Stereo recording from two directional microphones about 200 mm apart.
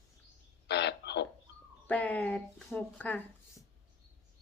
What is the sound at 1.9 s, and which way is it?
Speech, 5° left (ahead or behind).